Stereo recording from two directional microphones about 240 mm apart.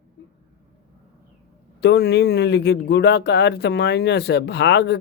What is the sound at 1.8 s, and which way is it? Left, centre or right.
Speech, left.